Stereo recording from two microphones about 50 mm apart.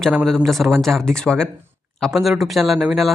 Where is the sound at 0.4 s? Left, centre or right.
Centre.